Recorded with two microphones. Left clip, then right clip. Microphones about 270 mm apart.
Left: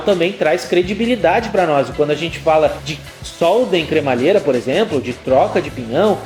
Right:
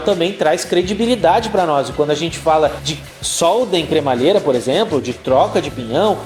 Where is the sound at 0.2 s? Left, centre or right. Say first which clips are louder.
Even; centre.